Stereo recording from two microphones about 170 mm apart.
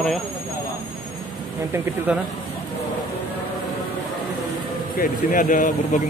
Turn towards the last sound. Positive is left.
turn(degrees=50)  # may be behind; listen again after turning